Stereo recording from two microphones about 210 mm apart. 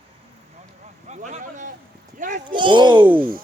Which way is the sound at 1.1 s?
35° right (ahead or behind).